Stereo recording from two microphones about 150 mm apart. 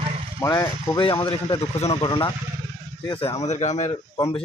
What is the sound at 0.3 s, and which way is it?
Speech, 25° left (ahead or behind).